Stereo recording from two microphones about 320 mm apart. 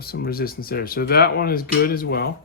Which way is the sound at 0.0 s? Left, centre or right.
Left.